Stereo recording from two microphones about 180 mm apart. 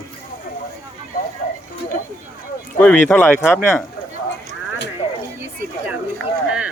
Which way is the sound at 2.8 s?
5° left (ahead or behind).